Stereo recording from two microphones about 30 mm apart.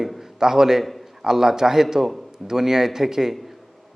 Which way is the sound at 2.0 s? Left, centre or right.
Centre.